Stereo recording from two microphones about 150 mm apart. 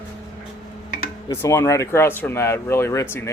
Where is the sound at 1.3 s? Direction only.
20° left (ahead or behind).